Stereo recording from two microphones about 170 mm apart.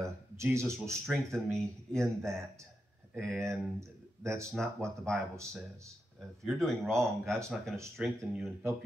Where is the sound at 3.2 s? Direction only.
Centre (ahead or behind).